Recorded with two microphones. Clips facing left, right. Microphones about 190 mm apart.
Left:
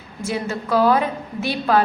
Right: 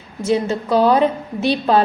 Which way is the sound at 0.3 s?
25° right (ahead or behind).